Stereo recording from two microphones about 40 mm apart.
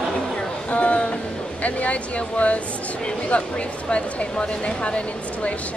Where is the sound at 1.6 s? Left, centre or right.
Left.